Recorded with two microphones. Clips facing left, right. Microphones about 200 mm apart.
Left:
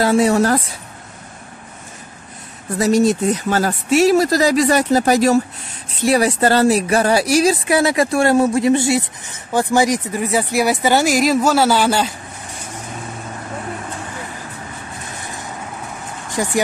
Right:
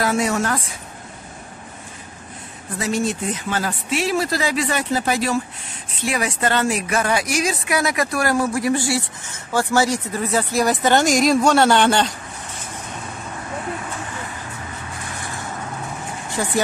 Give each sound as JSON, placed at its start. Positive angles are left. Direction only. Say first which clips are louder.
{"t": 0.0, "sound": "speech", "louder": "left 6 dB", "side_deg": 30}
{"t": 2.8, "sound": "speech", "louder": "left 8 dB", "side_deg": 40}
{"t": 16.4, "sound": "speech", "louder": "left 3 dB", "side_deg": 15}